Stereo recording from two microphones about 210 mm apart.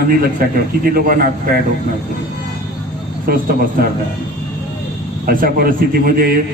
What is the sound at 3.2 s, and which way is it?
Speech, 45° right (ahead or behind).